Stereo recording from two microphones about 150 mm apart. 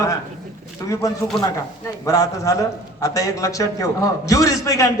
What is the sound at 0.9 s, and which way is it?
A man's voice, 20° left (ahead or behind).